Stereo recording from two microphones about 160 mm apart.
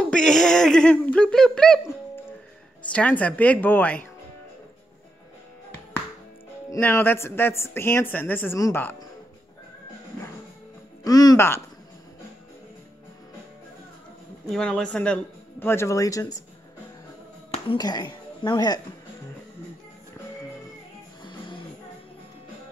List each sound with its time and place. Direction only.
0.1 s speech: 5° left (ahead or behind)
2.9 s a woman's voice: 10° left (ahead or behind)
6.7 s a woman's voice: 15° left (ahead or behind)
11.1 s speech: 25° left (ahead or behind)
14.5 s speech: 5° left (ahead or behind); by 16.3 s 20° left (ahead or behind)
17.7 s speech: 25° left (ahead or behind)
21.2 s music: 30° left (ahead or behind)